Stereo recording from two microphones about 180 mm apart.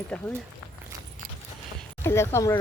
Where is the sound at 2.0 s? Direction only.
15° left (ahead or behind).